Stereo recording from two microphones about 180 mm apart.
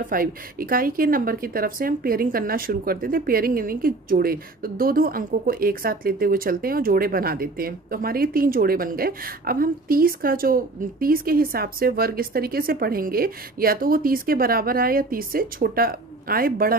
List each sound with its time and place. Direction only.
0.1 s speech: 50° right (ahead or behind)